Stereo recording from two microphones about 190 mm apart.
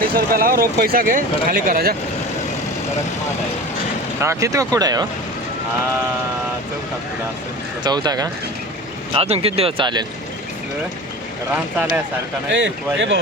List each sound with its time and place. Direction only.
0.2 s speech: 50° right (ahead or behind)
4.2 s speech: 15° right (ahead or behind)
7.9 s speech: 20° right (ahead or behind)
9.1 s speech: 30° right (ahead or behind)
11.5 s speech: 5° right (ahead or behind)
12.5 s speech: 70° right (ahead or behind)